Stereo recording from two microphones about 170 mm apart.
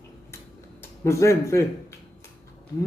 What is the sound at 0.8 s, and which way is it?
Speech, 15° left (ahead or behind).